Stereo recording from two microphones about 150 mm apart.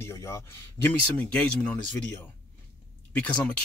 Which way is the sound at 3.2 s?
10° left (ahead or behind).